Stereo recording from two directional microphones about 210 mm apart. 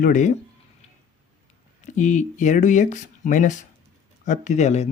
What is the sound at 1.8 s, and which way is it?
Speech, 35° left (ahead or behind).